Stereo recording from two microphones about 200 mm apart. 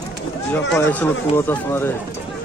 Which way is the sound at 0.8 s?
10° left (ahead or behind).